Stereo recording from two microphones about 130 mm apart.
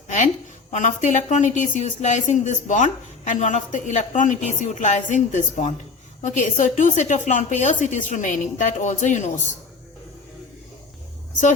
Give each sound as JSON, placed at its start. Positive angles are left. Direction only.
{"t": 0.7, "sound": "speech", "side_deg": 75}